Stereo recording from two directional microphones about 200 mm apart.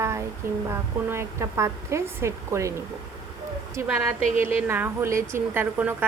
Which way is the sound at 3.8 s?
10° right (ahead or behind).